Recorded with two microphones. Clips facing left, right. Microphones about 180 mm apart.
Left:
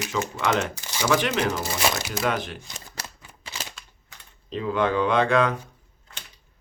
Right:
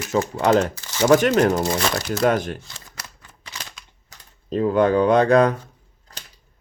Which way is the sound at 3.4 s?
25° left (ahead or behind).